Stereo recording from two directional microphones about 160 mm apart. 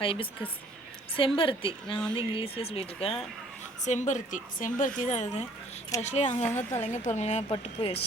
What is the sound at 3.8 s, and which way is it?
A woman's voice, 50° left (ahead or behind).